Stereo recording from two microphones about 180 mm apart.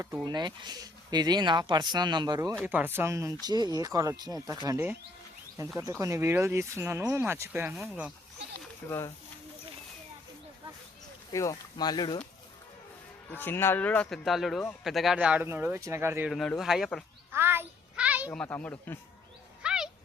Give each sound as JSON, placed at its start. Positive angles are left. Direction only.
{"t": 0.3, "sound": "speech", "side_deg": -25}
{"t": 8.9, "sound": "speech", "side_deg": 15}
{"t": 11.3, "sound": "speech", "side_deg": 20}
{"t": 13.3, "sound": "speech", "side_deg": 10}
{"t": 16.3, "sound": "speech", "side_deg": 0}
{"t": 17.3, "sound": "a sound", "side_deg": -10}
{"t": 18.3, "sound": "speech", "side_deg": 10}
{"t": 19.6, "sound": "a sound", "side_deg": -5}